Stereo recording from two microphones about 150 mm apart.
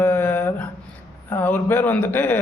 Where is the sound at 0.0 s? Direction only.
15° left (ahead or behind).